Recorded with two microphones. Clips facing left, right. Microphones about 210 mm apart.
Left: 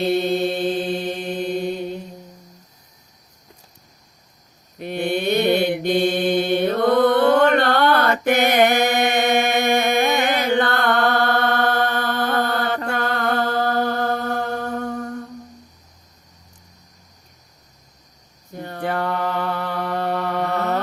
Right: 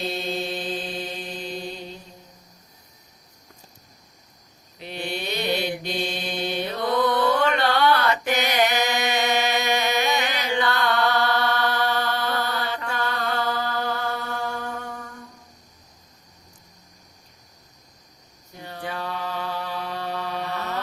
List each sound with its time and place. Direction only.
0.0 s mantra: 60° left (ahead or behind)
4.8 s mantra: 55° left (ahead or behind)
14.8 s humming: 45° left (ahead or behind)
18.5 s mantra: 50° left (ahead or behind)